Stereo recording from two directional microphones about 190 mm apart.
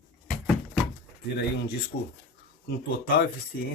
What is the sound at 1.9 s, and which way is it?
Speech, 55° left (ahead or behind).